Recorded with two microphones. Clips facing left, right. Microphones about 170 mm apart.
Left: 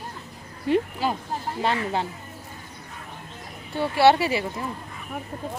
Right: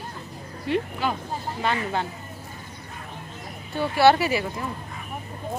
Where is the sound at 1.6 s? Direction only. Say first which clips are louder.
Left 1 dB; 30° left (ahead or behind).